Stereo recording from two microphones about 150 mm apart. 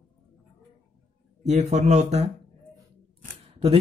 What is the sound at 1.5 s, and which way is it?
Speech, 50° right (ahead or behind).